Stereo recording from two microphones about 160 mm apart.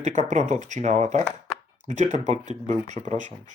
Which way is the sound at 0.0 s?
50° right (ahead or behind).